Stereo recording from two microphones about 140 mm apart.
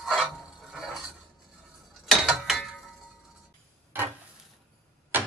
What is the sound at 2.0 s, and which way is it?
Mechanisms, centre (ahead or behind).